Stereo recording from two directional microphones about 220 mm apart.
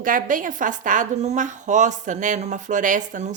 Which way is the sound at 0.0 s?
40° right (ahead or behind).